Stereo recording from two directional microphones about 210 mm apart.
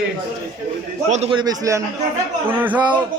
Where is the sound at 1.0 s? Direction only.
30° right (ahead or behind); by 2.8 s 10° right (ahead or behind).